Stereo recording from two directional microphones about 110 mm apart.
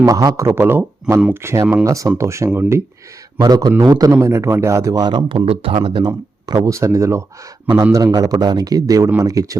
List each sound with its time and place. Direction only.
0.0 s a man's voice: 35° right (ahead or behind)
3.4 s a man's voice: 40° right (ahead or behind)
5.5 s speech: 55° right (ahead or behind)
6.1 s a man's voice: 35° right (ahead or behind)